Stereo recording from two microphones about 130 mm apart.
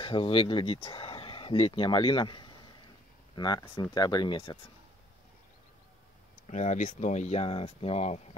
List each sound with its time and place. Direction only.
0.0 s speech: 40° left (ahead or behind)
6.4 s speech: 65° left (ahead or behind)